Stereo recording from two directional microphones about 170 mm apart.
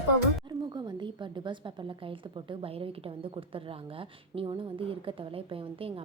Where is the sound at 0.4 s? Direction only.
25° right (ahead or behind).